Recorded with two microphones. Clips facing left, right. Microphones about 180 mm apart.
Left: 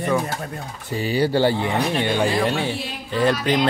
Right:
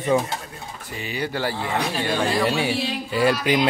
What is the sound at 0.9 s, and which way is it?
Speech, 35° left (ahead or behind).